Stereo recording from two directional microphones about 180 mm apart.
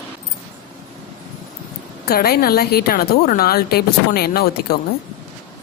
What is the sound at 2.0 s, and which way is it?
A woman's voice, 60° left (ahead or behind).